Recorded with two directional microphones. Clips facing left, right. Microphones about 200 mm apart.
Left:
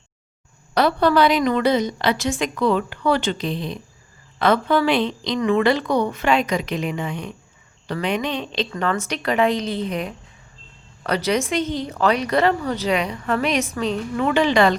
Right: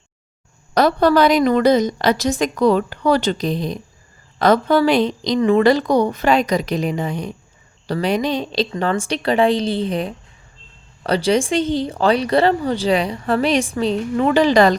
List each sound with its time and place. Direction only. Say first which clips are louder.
0.7 s a woman's voice: right 3 dB; 40° right (ahead or behind)